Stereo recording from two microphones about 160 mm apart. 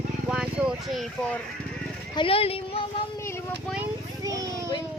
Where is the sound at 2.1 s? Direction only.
35° left (ahead or behind).